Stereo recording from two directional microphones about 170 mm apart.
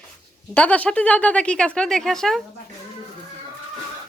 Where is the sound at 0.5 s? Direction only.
10° left (ahead or behind).